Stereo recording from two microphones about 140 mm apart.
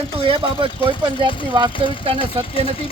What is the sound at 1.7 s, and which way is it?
Speech, 35° left (ahead or behind).